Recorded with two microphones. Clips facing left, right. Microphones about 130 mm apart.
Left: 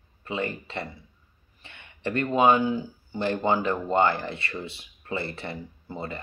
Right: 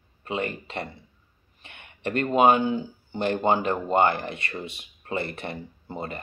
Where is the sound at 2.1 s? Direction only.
20° right (ahead or behind).